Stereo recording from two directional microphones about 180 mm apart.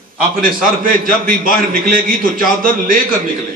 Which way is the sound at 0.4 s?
50° right (ahead or behind).